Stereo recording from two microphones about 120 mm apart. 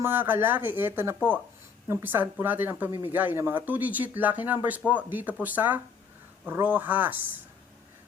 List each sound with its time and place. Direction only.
0.0 s speech: 15° right (ahead or behind)